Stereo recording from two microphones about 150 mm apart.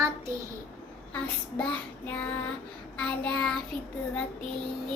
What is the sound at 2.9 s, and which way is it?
Child singing, 10° left (ahead or behind).